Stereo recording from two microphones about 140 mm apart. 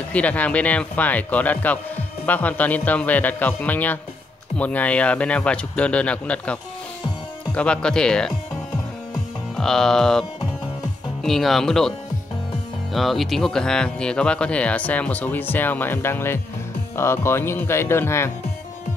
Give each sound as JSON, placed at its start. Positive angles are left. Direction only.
{"t": 0.1, "sound": "speech", "side_deg": 10}
{"t": 9.6, "sound": "speech", "side_deg": 5}
{"t": 11.2, "sound": "speech", "side_deg": 0}
{"t": 12.9, "sound": "speech", "side_deg": 0}